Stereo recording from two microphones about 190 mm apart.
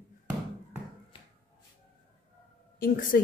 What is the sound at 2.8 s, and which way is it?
Speech, 45° left (ahead or behind).